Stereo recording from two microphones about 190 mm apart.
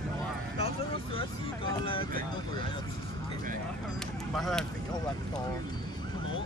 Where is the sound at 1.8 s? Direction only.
30° left (ahead or behind).